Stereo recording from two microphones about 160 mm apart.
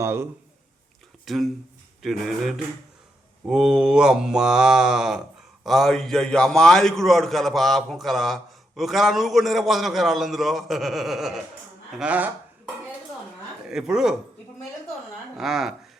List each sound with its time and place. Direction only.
0.0 s speech: 15° right (ahead or behind)
1.2 s a man's voice: centre (ahead or behind)
13.7 s a man's voice: 5° right (ahead or behind)
15.4 s a man's voice: centre (ahead or behind)